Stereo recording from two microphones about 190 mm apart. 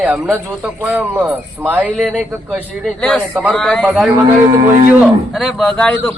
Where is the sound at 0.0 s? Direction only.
5° right (ahead or behind).